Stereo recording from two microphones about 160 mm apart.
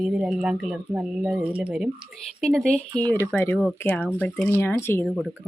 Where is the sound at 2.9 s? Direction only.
25° right (ahead or behind).